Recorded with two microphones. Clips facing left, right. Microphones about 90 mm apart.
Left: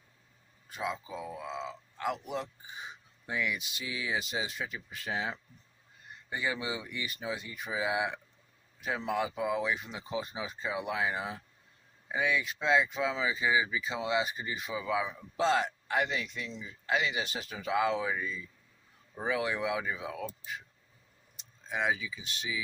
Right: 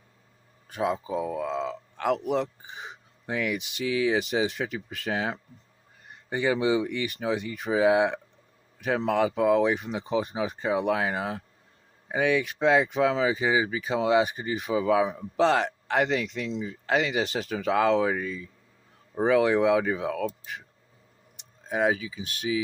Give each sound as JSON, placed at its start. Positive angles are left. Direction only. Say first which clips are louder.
{"t": 0.7, "sound": "speech", "louder": "right 9 dB", "side_deg": -55}
{"t": 3.2, "sound": "speech", "louder": "right 5 dB", "side_deg": -60}
{"t": 6.7, "sound": "speech", "louder": "right 12 dB", "side_deg": -65}
{"t": 15.4, "sound": "speech", "louder": "right 6 dB", "side_deg": -70}
{"t": 21.6, "sound": "speech", "louder": "right 7 dB", "side_deg": -45}